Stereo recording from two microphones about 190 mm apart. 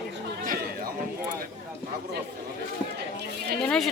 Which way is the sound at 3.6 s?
5° left (ahead or behind).